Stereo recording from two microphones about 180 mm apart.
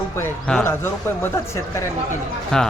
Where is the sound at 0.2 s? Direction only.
5° left (ahead or behind).